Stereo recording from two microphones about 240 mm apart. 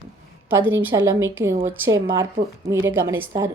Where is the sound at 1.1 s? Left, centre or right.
Centre.